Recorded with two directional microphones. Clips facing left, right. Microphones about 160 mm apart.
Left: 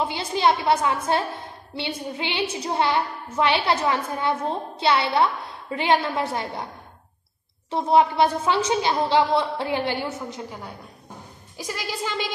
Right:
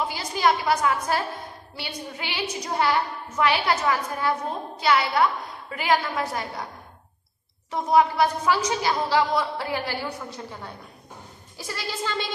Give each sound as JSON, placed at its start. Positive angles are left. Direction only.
{"t": 0.0, "sound": "a woman's voice", "side_deg": 25}
{"t": 7.7, "sound": "a woman's voice", "side_deg": 25}